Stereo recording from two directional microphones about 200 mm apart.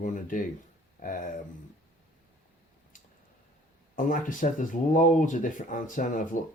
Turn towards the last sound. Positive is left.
turn(degrees=40)  # may be behind; listen again after turning